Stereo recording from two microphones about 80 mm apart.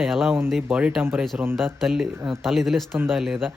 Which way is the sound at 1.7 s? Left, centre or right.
Centre.